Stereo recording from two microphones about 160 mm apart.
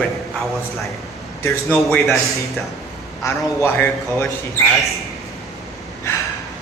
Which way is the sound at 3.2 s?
20° left (ahead or behind).